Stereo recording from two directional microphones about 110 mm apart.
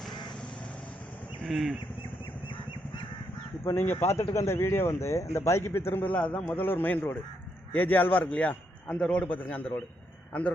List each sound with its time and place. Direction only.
1.5 s speech: centre (ahead or behind)
3.6 s a man's voice: 25° left (ahead or behind)